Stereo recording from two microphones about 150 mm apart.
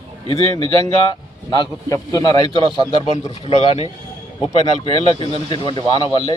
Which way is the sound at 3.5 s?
45° left (ahead or behind).